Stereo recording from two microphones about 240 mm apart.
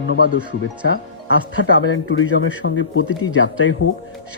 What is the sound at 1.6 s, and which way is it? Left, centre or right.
Speech, left.